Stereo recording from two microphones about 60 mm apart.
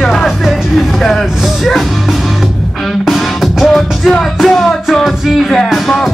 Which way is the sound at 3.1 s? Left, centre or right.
Centre.